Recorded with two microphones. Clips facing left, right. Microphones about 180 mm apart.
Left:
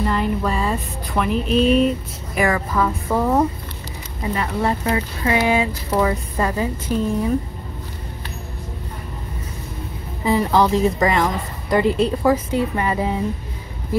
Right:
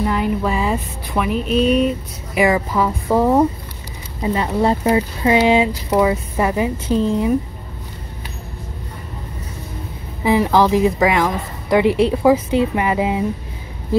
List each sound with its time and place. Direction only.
0.0 s a sound: 5° right (ahead or behind)
2.3 s speech: 15° right (ahead or behind)
4.2 s speech: 25° right (ahead or behind)
10.2 s a woman's voice: 5° right (ahead or behind)
11.8 s a woman's voice: 70° right (ahead or behind)
12.1 s speech: 10° right (ahead or behind)